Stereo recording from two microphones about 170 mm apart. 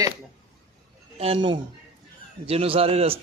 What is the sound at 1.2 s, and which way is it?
A man's voice, 30° right (ahead or behind).